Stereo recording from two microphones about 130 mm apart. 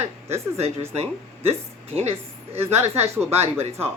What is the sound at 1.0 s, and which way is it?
A woman's voice, 50° right (ahead or behind).